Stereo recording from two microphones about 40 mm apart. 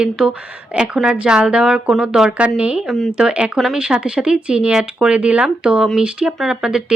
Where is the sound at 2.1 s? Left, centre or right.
Centre.